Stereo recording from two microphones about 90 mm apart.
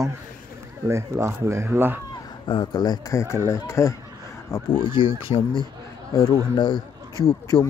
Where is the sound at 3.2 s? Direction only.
30° left (ahead or behind).